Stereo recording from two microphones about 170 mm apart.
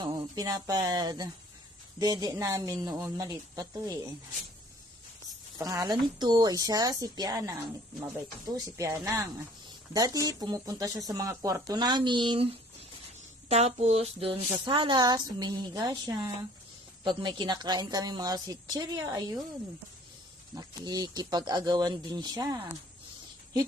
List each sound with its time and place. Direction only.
0.0 s speech: 25° right (ahead or behind)
5.5 s speech: 20° right (ahead or behind)
20.6 s speech: 25° right (ahead or behind)